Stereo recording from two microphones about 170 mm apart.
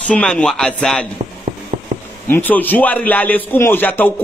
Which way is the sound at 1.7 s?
50° right (ahead or behind).